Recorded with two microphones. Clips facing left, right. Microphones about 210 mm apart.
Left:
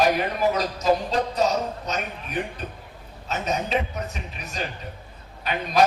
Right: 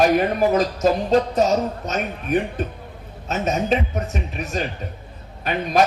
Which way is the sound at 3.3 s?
50° right (ahead or behind).